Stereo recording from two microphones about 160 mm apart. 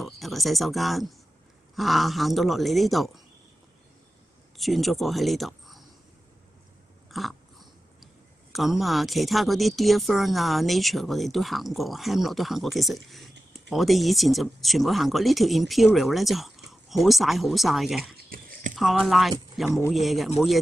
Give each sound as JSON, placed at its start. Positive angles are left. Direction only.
{"t": 0.0, "sound": "speech", "side_deg": 0}
{"t": 4.6, "sound": "speech", "side_deg": 0}
{"t": 7.1, "sound": "speech", "side_deg": 0}
{"t": 18.1, "sound": "a sound", "side_deg": -65}
{"t": 18.8, "sound": "a man's voice", "side_deg": 0}